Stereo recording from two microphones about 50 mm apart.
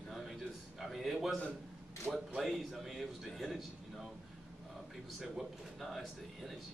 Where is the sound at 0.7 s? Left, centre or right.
Centre.